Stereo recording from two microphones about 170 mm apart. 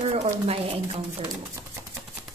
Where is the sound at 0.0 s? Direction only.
40° right (ahead or behind).